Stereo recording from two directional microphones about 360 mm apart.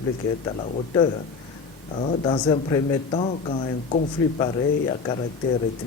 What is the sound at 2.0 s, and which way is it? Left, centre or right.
Speech, centre.